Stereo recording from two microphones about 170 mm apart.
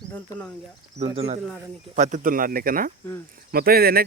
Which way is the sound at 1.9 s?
45° right (ahead or behind).